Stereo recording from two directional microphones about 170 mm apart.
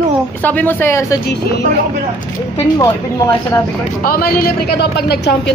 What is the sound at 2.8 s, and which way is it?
Snicker, 15° left (ahead or behind).